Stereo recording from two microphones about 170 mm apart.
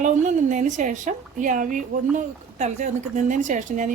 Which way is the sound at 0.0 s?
45° right (ahead or behind).